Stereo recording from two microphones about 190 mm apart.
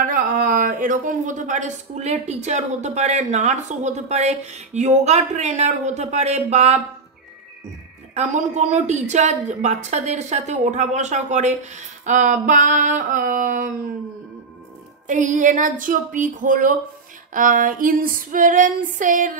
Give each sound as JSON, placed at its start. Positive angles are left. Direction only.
{"t": 0.0, "sound": "speech", "side_deg": -45}
{"t": 8.1, "sound": "speech", "side_deg": -35}
{"t": 15.0, "sound": "female singing", "side_deg": -40}